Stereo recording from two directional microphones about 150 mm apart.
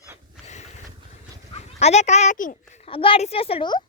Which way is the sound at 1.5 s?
45° left (ahead or behind).